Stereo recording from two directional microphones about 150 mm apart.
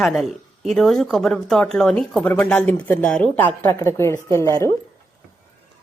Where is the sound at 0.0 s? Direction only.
Centre (ahead or behind); by 4.7 s 20° left (ahead or behind).